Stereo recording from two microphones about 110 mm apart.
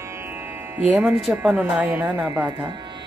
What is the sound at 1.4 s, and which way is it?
Speech, 10° right (ahead or behind).